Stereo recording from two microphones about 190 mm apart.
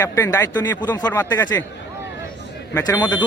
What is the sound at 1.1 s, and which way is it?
Speech, 10° left (ahead or behind).